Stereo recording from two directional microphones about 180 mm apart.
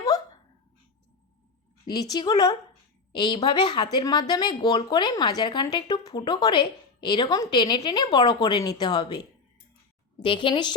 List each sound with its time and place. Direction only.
0.1 s dog: 20° left (ahead or behind)
1.9 s a woman's voice: 20° left (ahead or behind)